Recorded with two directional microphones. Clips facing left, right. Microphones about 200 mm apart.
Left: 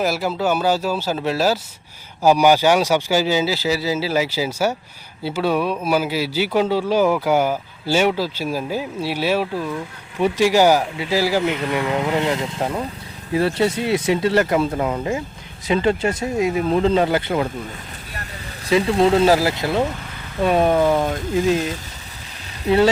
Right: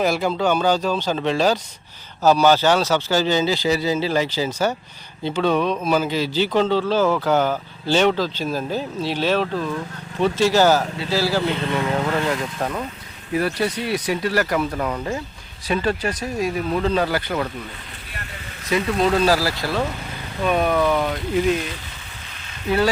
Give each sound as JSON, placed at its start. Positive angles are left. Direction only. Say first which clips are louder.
{"t": 0.0, "sound": "a man's voice", "louder": "right 1 dB", "side_deg": 5}
{"t": 11.4, "sound": "speech", "louder": "left 1 dB", "side_deg": -30}
{"t": 11.7, "sound": "speech", "louder": "left 1 dB", "side_deg": 15}
{"t": 18.7, "sound": "speech", "louder": "left 4 dB", "side_deg": 25}
{"t": 22.6, "sound": "speech", "louder": "left 4 dB", "side_deg": 25}